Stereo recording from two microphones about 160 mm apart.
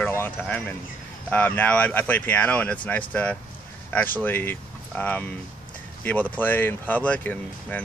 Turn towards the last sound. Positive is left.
turn(degrees=10)  # may be behind; listen again after turning